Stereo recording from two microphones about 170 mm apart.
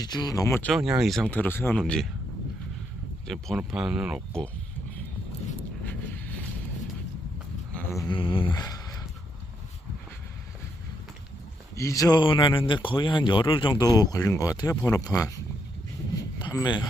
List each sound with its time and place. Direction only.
0.0 s speech: 25° left (ahead or behind)
0.7 s speech: 5° right (ahead or behind); by 1.8 s 10° left (ahead or behind)
1.8 s speech: centre (ahead or behind)
3.2 s speech: centre (ahead or behind)
5.8 s a sound: 10° left (ahead or behind)
8.0 s speech: 30° left (ahead or behind)
11.8 s speech: 20° left (ahead or behind)
16.5 s speech: 25° left (ahead or behind)